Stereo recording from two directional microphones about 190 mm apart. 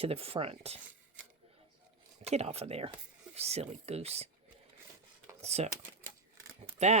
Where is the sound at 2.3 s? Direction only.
35° right (ahead or behind).